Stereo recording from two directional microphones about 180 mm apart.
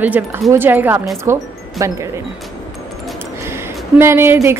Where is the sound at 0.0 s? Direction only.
10° right (ahead or behind).